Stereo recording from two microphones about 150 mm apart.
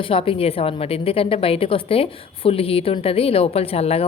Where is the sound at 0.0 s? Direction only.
40° left (ahead or behind).